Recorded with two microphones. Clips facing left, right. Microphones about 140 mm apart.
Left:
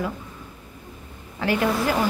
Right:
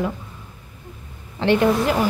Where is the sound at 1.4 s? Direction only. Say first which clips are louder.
Right 5 dB; 25° right (ahead or behind).